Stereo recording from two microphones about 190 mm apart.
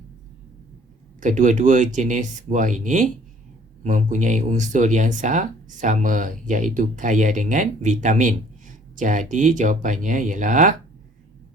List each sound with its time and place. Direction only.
1.2 s speech: 40° right (ahead or behind)